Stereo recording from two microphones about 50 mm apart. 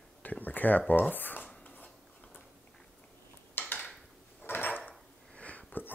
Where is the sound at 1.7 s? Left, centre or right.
Left.